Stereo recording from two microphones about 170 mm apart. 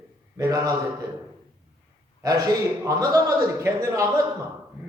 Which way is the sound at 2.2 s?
20° right (ahead or behind).